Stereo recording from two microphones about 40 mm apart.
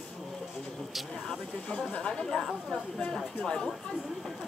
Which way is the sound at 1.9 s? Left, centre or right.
Left.